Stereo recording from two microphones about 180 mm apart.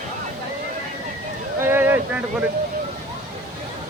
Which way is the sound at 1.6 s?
10° right (ahead or behind).